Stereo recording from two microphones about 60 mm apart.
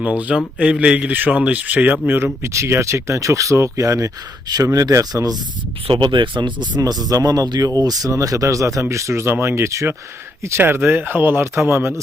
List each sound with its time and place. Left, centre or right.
0.0 s speech: right
2.4 s speech: right
4.5 s speech: right
7.1 s speech: right
10.6 s speech: right
11.5 s a man's voice: right